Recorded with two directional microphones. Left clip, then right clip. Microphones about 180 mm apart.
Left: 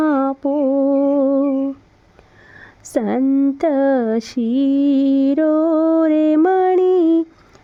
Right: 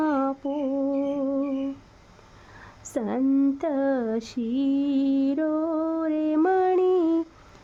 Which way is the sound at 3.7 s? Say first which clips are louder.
Left 9 dB; 35° left (ahead or behind).